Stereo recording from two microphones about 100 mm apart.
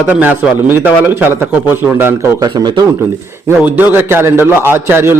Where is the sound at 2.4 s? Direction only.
45° right (ahead or behind).